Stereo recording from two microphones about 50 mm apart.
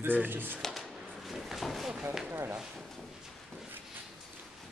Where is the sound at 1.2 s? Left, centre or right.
Centre.